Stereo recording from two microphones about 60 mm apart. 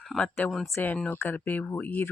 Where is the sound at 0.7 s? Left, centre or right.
Left.